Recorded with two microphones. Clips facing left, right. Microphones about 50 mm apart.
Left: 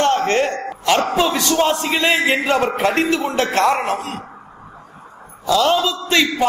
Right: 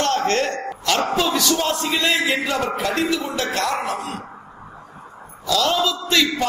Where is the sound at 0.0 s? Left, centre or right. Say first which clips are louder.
Left 3 dB; left.